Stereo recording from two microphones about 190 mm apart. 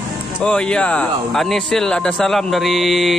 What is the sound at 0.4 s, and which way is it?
Speech, 5° left (ahead or behind).